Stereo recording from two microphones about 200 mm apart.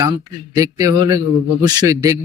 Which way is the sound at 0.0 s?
15° right (ahead or behind).